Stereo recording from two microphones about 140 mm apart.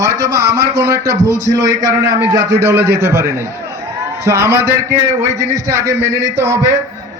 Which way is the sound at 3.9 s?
20° right (ahead or behind).